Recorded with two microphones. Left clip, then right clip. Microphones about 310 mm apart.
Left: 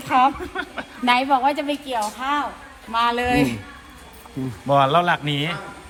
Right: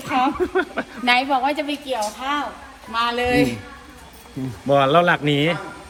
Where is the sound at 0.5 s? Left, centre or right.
Centre.